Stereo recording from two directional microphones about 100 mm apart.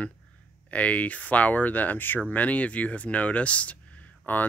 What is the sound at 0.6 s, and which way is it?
Speech, 15° left (ahead or behind).